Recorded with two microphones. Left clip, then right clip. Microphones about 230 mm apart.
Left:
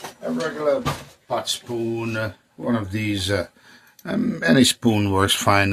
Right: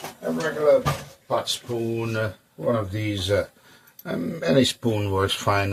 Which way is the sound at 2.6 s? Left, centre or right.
Left.